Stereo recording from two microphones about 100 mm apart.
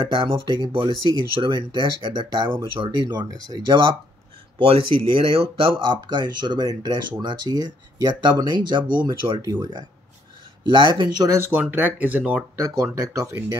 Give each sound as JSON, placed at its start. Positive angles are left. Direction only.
{"t": 0.0, "sound": "speech", "side_deg": -55}
{"t": 2.1, "sound": "speech", "side_deg": -45}
{"t": 4.6, "sound": "speech", "side_deg": -65}
{"t": 6.0, "sound": "speech", "side_deg": -45}
{"t": 11.3, "sound": "speech", "side_deg": -25}
{"t": 12.5, "sound": "speech", "side_deg": -35}